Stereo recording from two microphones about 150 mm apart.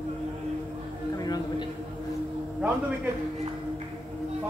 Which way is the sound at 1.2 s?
25° left (ahead or behind).